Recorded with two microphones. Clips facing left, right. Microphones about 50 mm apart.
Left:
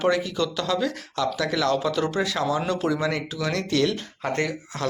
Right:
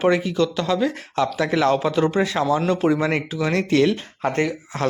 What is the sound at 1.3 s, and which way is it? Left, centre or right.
Speech, right.